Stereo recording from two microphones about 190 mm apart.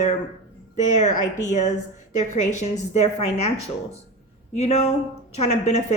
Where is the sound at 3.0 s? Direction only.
35° left (ahead or behind).